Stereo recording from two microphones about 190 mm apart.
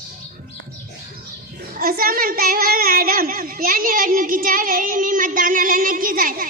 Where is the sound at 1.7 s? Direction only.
50° right (ahead or behind).